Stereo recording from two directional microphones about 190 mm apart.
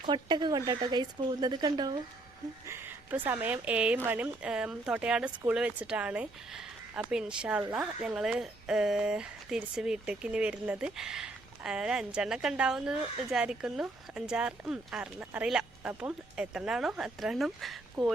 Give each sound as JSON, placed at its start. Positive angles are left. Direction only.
{"t": 0.0, "sound": "speech", "side_deg": -25}